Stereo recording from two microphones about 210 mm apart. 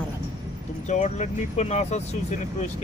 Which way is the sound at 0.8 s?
35° left (ahead or behind).